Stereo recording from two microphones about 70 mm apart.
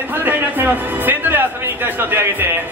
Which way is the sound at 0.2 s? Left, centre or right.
Right.